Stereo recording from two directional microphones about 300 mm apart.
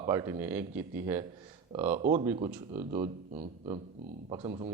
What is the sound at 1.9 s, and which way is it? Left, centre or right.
Speech, right.